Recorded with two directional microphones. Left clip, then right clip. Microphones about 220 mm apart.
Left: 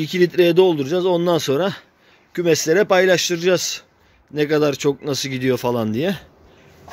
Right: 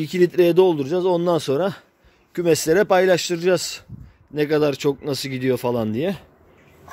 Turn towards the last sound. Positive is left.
turn(degrees=0)  # may be behind; listen again after turning